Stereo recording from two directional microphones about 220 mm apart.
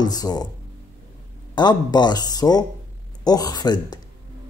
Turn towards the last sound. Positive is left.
turn(degrees=20)  # may be behind; listen again after turning